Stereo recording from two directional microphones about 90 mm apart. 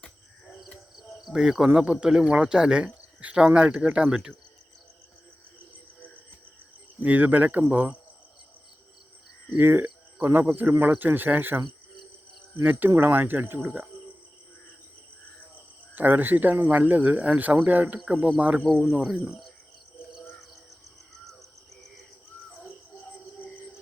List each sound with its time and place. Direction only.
0.0 s crow: centre (ahead or behind)
0.9 s speech: 5° right (ahead or behind)
7.0 s speech: 20° right (ahead or behind)
9.6 s speech: 25° right (ahead or behind)
12.6 s speech: 20° right (ahead or behind)
16.0 s speech: 20° right (ahead or behind)